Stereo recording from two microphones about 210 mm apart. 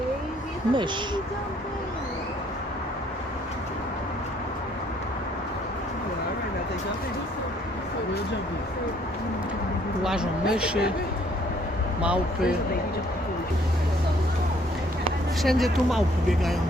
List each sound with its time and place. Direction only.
0.7 s speech: 20° right (ahead or behind)
10.0 s a sound: centre (ahead or behind)
10.5 s speech: 5° right (ahead or behind)
12.0 s speech: 5° right (ahead or behind)
15.4 s speech: centre (ahead or behind)